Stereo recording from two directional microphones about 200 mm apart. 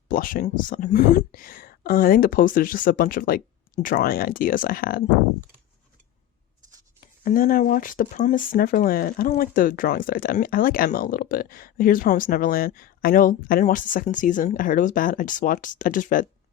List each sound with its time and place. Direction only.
0.1 s speech: 45° left (ahead or behind)
7.3 s speech: 40° left (ahead or behind)